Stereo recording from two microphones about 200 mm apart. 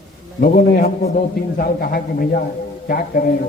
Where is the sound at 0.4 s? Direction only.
45° left (ahead or behind).